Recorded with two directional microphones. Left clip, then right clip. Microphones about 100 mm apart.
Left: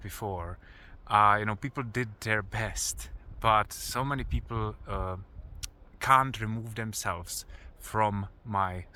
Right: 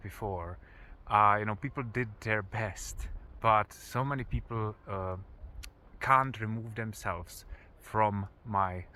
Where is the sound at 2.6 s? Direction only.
50° left (ahead or behind).